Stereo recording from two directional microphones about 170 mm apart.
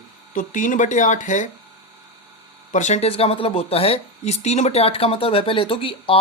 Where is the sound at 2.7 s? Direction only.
40° left (ahead or behind).